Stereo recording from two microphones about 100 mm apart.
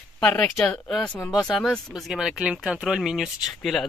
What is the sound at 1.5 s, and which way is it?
Speech, 5° left (ahead or behind).